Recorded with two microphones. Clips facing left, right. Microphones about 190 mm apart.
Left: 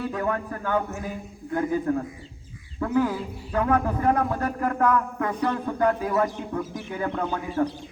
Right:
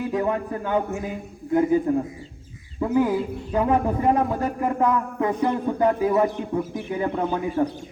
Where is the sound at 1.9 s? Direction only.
15° right (ahead or behind).